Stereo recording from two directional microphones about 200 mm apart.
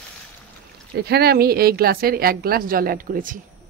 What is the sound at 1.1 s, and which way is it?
A woman's voice, 50° right (ahead or behind).